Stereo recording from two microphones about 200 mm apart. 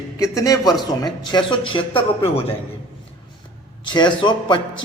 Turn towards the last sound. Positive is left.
turn(degrees=25)  # may be behind; listen again after turning